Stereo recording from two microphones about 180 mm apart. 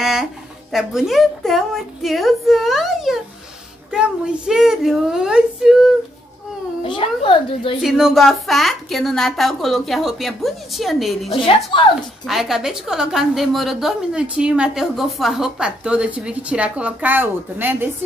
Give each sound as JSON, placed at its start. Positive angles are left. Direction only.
{"t": 0.0, "sound": "a woman's voice", "side_deg": 0}
{"t": 6.8, "sound": "speech", "side_deg": 30}
{"t": 7.8, "sound": "a woman's voice", "side_deg": 0}
{"t": 11.3, "sound": "a woman's voice", "side_deg": 30}
{"t": 12.3, "sound": "a woman's voice", "side_deg": 0}